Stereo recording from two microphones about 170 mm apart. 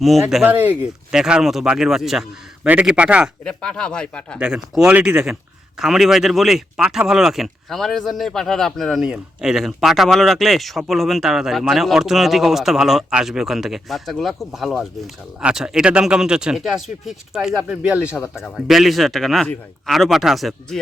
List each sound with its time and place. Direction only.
0.0 s speech: centre (ahead or behind)
3.4 s speech: 5° left (ahead or behind)